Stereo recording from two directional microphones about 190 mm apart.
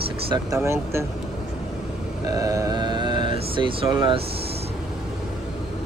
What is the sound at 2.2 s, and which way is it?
Speech, 20° right (ahead or behind).